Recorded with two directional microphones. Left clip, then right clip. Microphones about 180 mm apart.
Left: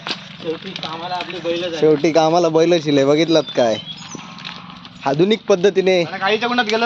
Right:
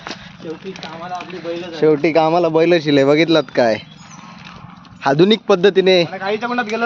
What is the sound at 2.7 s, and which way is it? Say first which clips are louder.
Speech: right 2 dB; 20° right (ahead or behind).